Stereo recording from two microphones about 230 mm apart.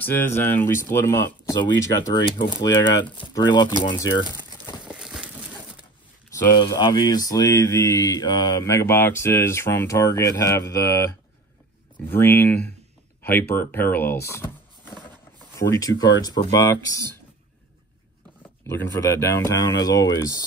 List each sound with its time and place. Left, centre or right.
0.0 s speech: centre
4.8 s a sound: centre
6.3 s speech: centre
18.7 s speech: centre